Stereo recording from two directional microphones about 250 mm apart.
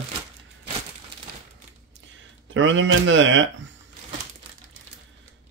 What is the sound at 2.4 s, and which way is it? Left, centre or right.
Speech, right.